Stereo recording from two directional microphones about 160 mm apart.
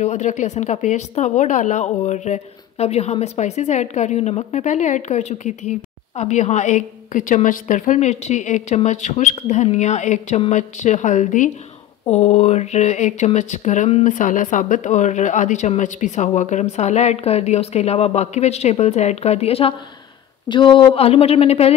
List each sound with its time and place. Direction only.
0.0 s speech: 45° left (ahead or behind)